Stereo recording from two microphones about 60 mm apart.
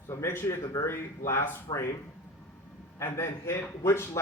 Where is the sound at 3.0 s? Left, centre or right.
Left.